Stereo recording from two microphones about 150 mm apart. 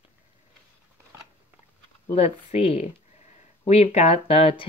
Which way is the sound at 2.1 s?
40° left (ahead or behind).